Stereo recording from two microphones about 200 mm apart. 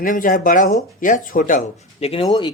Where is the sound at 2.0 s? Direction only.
30° left (ahead or behind).